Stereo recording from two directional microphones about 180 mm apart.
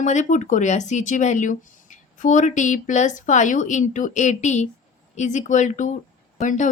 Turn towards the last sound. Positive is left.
turn(degrees=45)  # may be behind; listen again after turning